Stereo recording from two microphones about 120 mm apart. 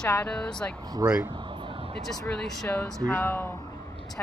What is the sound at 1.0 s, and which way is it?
Speech, 30° right (ahead or behind).